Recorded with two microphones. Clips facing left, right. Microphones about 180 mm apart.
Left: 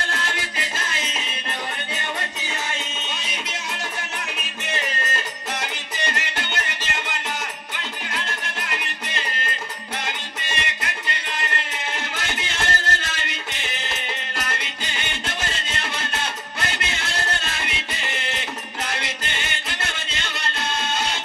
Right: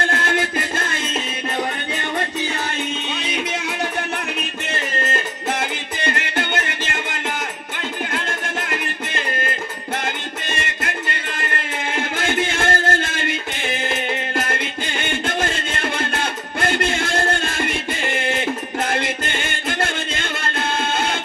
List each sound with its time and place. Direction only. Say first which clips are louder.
0.0 s music: right 8 dB; 55° right (ahead or behind)
5.1 s music: right 6 dB; 55° right (ahead or behind)